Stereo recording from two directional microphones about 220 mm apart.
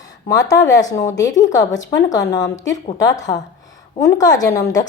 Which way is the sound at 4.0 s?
15° left (ahead or behind).